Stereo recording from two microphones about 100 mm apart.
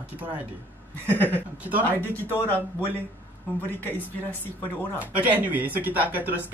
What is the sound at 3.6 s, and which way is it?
Speech, 20° left (ahead or behind).